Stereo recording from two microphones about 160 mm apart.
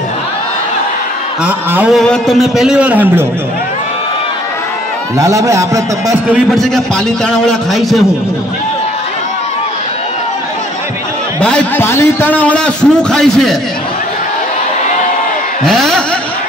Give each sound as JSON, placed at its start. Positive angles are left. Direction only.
{"t": 1.4, "sound": "a man's voice", "side_deg": -10}
{"t": 5.1, "sound": "a man's voice", "side_deg": -20}
{"t": 6.5, "sound": "a man's voice", "side_deg": 5}
{"t": 11.4, "sound": "a man's voice", "side_deg": 10}
{"t": 15.6, "sound": "a man's voice", "side_deg": 0}